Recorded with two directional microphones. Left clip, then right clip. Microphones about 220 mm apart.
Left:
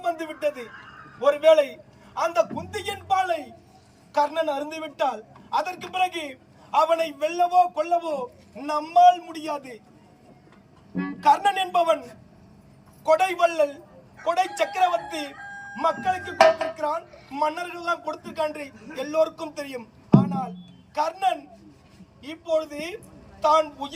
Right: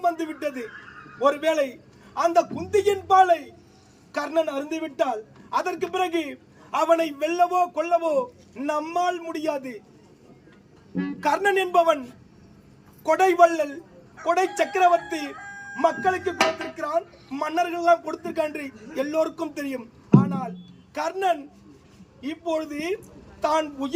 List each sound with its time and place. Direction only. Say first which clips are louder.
0.0 s a man's voice: right 1 dB; 15° right (ahead or behind)
11.2 s a man's voice: left 2 dB; 15° right (ahead or behind)
13.1 s a man's voice: right 5 dB; 15° right (ahead or behind)